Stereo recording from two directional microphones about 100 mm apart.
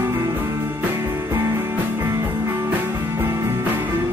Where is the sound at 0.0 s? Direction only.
20° right (ahead or behind).